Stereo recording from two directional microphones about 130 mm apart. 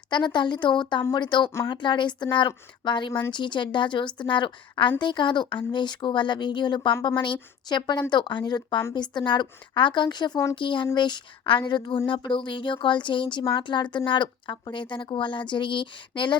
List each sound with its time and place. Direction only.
0.1 s speech: 35° left (ahead or behind)